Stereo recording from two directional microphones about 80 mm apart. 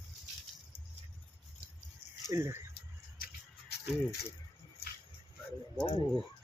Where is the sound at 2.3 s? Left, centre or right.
Right.